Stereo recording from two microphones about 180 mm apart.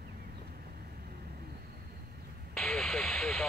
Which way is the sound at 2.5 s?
5° left (ahead or behind).